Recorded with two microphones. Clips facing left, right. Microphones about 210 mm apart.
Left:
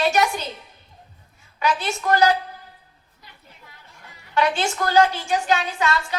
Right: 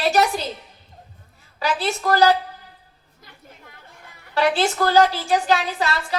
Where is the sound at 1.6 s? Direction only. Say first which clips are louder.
Right 1 dB; 35° right (ahead or behind).